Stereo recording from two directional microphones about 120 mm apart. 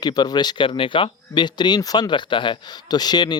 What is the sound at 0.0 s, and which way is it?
Speech, 35° left (ahead or behind).